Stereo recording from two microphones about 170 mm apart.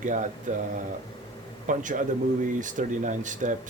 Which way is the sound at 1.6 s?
50° right (ahead or behind).